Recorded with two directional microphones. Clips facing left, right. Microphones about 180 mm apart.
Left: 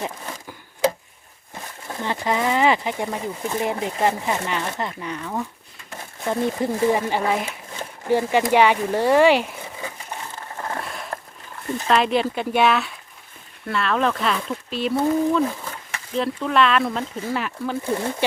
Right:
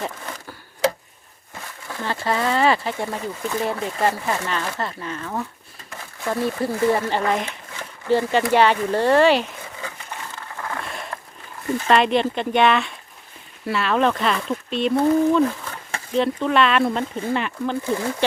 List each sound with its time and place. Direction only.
0.0 s a sound: 15° left (ahead or behind)
1.5 s speech: 20° left (ahead or behind)
6.2 s speech: 20° left (ahead or behind)
10.8 s a sound: centre (ahead or behind)
11.9 s speech: centre (ahead or behind)
17.9 s speech: 25° left (ahead or behind)